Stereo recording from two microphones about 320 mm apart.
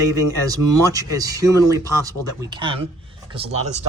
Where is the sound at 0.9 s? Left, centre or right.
Centre.